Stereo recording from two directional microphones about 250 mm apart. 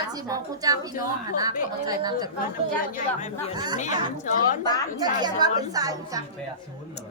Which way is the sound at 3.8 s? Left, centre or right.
Left.